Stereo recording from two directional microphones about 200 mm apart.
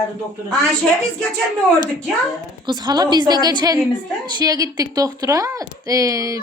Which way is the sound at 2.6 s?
20° right (ahead or behind).